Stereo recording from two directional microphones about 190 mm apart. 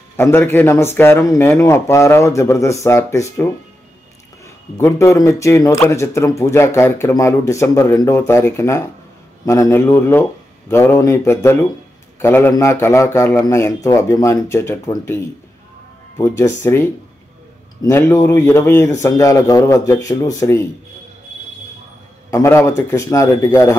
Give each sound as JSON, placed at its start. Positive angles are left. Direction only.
{"t": 0.2, "sound": "speech", "side_deg": 10}
{"t": 4.7, "sound": "speech", "side_deg": 15}
{"t": 16.2, "sound": "speech", "side_deg": 15}
{"t": 22.3, "sound": "speech", "side_deg": 15}